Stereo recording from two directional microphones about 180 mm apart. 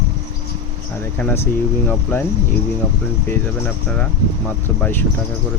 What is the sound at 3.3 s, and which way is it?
Speech, 10° left (ahead or behind).